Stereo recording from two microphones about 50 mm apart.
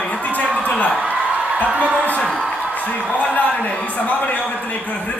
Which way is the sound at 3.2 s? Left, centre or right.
Left.